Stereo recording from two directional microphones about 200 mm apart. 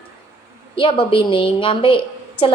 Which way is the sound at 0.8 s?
25° left (ahead or behind).